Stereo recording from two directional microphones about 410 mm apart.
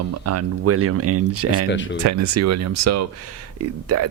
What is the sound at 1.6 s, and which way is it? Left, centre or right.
Speech, left.